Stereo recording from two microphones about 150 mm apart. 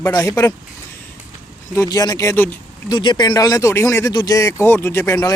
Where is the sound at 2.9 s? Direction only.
30° left (ahead or behind).